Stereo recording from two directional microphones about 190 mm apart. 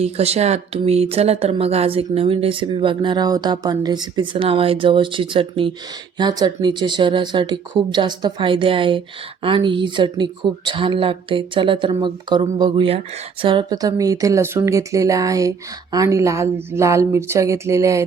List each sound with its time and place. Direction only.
0.0 s speech: 35° right (ahead or behind); by 18.0 s 15° right (ahead or behind)